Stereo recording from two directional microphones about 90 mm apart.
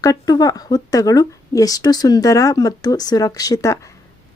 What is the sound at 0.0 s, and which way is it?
Speech, 40° left (ahead or behind).